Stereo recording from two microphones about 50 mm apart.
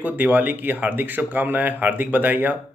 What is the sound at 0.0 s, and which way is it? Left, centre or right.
Speech, right.